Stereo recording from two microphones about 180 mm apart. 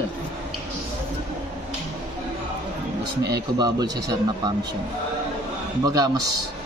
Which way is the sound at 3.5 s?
25° right (ahead or behind).